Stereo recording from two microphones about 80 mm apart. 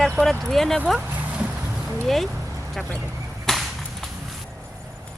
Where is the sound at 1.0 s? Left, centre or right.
Right.